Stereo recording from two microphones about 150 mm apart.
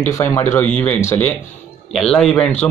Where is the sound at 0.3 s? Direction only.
15° left (ahead or behind).